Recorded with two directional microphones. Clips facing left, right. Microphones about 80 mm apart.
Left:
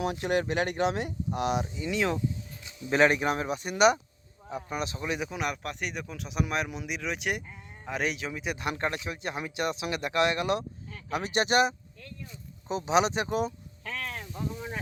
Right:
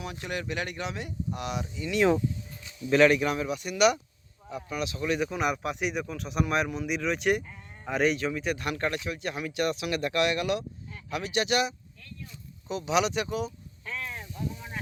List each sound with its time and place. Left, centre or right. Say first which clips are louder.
0.0 s speech: left 7 dB; left
1.7 s speech: even; centre
2.9 s speech: right 2 dB; left
5.2 s speech: right 4 dB; centre
5.5 s speech: right 4 dB; centre; by 13.3 s left
13.8 s a sound: left 1 dB; left